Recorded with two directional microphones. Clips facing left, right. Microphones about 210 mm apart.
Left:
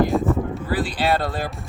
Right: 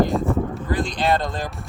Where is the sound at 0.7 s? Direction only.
5° left (ahead or behind).